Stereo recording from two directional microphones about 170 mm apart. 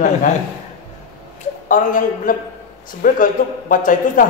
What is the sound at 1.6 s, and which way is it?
Speech, 55° left (ahead or behind).